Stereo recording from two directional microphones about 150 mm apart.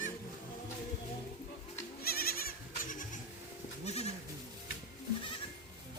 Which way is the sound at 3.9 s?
45° left (ahead or behind).